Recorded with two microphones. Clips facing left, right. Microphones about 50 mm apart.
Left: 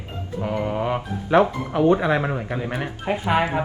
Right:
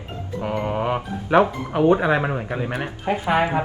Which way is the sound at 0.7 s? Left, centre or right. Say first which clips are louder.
Right 1 dB; centre.